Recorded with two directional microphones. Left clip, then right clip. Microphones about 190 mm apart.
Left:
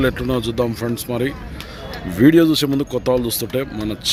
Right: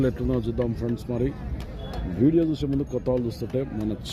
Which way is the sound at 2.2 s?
15° left (ahead or behind).